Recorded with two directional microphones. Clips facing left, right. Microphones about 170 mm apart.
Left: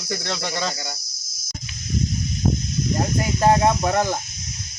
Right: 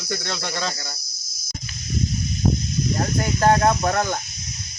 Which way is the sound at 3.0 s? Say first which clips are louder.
Even; 10° left (ahead or behind).